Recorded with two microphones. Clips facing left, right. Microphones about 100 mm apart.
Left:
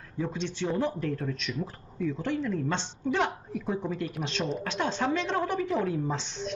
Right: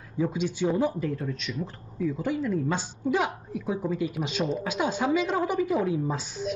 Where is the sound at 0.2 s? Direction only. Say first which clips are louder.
Right 5 dB; 10° right (ahead or behind).